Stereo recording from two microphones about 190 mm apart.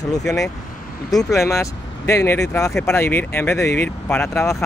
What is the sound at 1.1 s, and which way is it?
Speech, 15° left (ahead or behind).